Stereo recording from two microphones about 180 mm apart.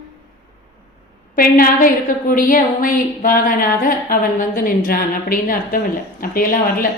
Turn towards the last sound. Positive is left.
turn(degrees=50)  # may be behind; listen again after turning